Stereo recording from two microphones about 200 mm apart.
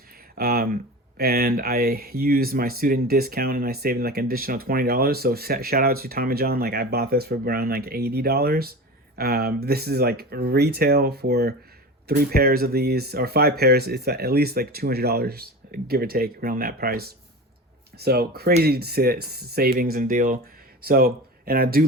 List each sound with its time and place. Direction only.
0.3 s speech: 50° right (ahead or behind)